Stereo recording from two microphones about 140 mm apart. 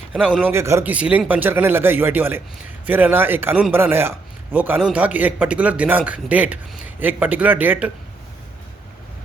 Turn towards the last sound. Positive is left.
turn(degrees=-10)  # may be behind; listen again after turning